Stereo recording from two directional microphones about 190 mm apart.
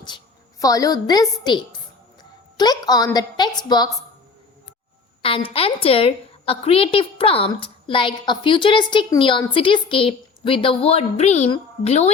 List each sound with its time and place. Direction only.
0.6 s a woman's voice: 20° left (ahead or behind)
5.2 s a woman's voice: 30° left (ahead or behind)